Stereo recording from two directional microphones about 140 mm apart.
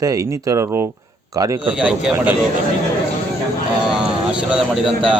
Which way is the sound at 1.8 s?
5° right (ahead or behind).